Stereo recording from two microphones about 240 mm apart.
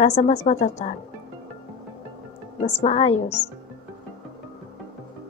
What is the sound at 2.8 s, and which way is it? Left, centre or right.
Speech, left.